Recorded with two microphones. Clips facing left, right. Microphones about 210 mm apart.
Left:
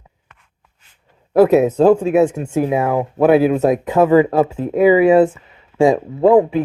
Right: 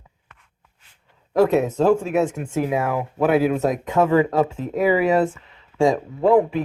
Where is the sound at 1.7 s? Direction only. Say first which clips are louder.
Left 6 dB; 35° left (ahead or behind).